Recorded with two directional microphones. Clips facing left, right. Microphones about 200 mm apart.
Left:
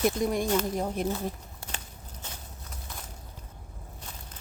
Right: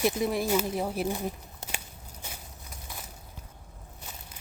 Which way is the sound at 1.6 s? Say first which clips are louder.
Right 1 dB; 20° right (ahead or behind).